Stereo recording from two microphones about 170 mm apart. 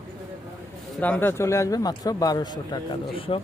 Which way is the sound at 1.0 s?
10° left (ahead or behind).